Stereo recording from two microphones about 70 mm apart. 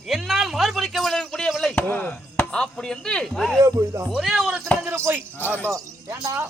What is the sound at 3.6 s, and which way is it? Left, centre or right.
Speech, right.